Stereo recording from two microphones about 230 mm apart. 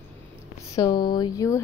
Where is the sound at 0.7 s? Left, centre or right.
Centre.